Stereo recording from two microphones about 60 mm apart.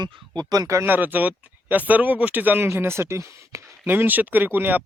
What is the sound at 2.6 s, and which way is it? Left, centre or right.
Speech, right.